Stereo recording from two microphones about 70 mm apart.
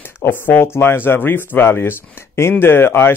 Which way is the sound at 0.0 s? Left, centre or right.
Left.